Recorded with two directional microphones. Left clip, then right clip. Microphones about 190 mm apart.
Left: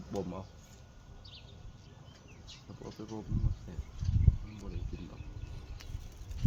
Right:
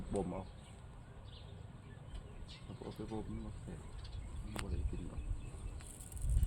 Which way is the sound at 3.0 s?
85° left.